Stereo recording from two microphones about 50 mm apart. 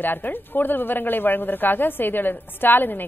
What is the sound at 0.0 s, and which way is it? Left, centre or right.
A woman's voice, left.